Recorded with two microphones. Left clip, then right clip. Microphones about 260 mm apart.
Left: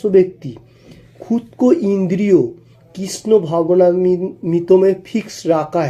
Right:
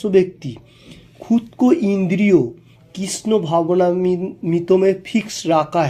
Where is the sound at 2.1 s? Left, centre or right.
Right.